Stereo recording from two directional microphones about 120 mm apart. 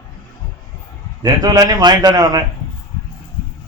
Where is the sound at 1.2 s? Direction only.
30° right (ahead or behind).